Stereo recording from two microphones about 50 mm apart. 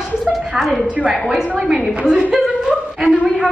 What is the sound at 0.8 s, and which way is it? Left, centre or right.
Speech, right.